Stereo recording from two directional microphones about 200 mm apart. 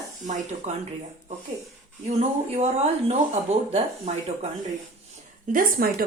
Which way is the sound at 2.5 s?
35° right (ahead or behind).